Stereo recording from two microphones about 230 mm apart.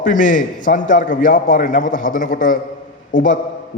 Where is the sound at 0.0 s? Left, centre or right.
Left.